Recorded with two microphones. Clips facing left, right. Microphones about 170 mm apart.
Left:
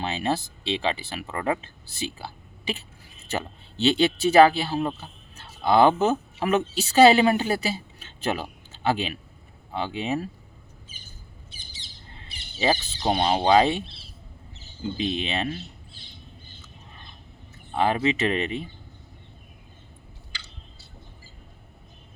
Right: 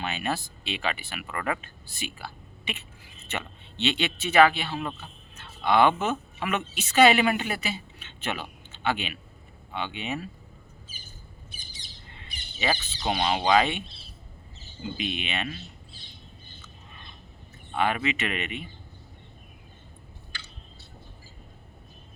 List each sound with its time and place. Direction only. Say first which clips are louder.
0.0 s speech: left 4 dB; 30° left (ahead or behind)
11.5 s bird: even; 25° left (ahead or behind)
14.9 s speech: left 5 dB; 30° left (ahead or behind)
17.7 s speech: left 4 dB; 30° left (ahead or behind)